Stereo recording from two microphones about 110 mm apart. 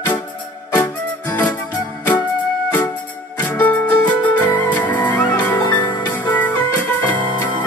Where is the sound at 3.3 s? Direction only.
15° left (ahead or behind).